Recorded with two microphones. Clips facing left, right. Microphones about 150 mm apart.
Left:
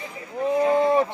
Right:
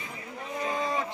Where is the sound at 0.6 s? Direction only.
60° left (ahead or behind).